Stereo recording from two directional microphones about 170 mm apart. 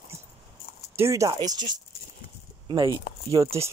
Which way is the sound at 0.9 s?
15° right (ahead or behind).